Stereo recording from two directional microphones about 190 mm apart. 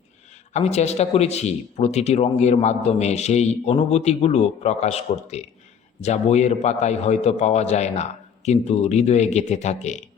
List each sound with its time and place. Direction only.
0.5 s speech: 35° left (ahead or behind)